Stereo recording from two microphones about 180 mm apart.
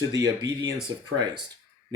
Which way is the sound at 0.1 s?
20° right (ahead or behind).